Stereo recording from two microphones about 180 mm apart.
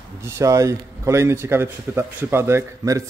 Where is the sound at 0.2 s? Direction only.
15° right (ahead or behind).